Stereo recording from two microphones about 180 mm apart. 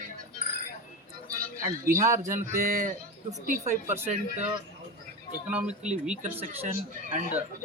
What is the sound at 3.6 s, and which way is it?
Speech, 15° right (ahead or behind).